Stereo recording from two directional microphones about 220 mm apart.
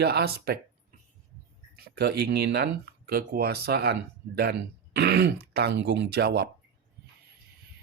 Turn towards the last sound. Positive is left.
turn(degrees=-45)  # may be behind; listen again after turning